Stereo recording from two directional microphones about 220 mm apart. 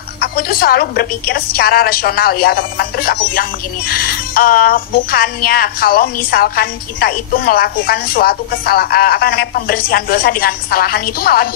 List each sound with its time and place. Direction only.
0.2 s speech: 45° left (ahead or behind)